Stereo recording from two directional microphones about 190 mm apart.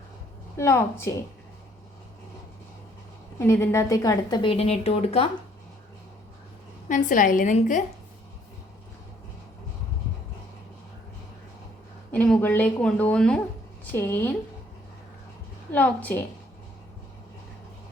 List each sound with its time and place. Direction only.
0.5 s speech: 15° left (ahead or behind)
3.3 s a woman's voice: 15° left (ahead or behind); by 5.3 s 30° left (ahead or behind)
6.8 s a woman's voice: 45° left (ahead or behind)
12.1 s speech: 10° left (ahead or behind)
15.7 s speech: 10° left (ahead or behind)